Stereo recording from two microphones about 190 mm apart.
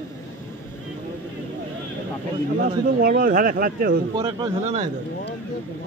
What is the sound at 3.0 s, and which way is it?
Speech, 50° right (ahead or behind).